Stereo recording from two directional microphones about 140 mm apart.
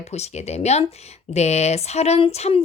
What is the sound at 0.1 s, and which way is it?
Speech, 50° left (ahead or behind).